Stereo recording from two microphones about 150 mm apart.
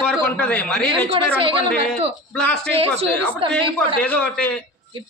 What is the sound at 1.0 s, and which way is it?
Speech, 40° right (ahead or behind).